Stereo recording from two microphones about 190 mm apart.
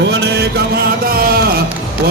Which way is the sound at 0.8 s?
50° right (ahead or behind).